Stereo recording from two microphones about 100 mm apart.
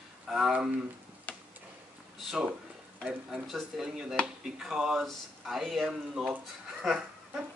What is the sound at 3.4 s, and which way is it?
Speech, centre (ahead or behind).